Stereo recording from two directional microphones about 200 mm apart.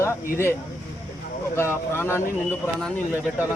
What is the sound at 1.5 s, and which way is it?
Speech, 10° left (ahead or behind).